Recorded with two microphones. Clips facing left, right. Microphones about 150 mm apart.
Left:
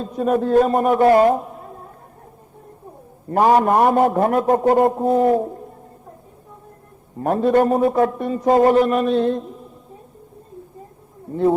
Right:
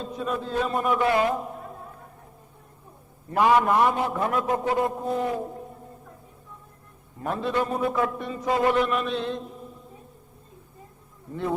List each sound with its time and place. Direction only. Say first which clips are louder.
0.0 s a man's voice: left 10 dB; 50° left (ahead or behind)
3.2 s a man's voice: left 5 dB; 40° left (ahead or behind)
7.2 s a man's voice: left 10 dB; 45° left (ahead or behind)